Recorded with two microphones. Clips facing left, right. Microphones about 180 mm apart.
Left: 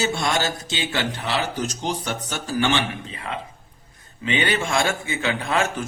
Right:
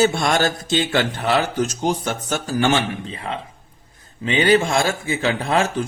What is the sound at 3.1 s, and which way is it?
A man's voice, 30° right (ahead or behind).